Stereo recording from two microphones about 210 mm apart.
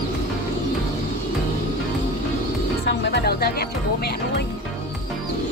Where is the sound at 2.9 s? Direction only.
55° left (ahead or behind).